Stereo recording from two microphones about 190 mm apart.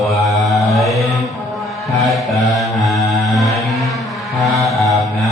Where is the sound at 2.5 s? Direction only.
Centre (ahead or behind).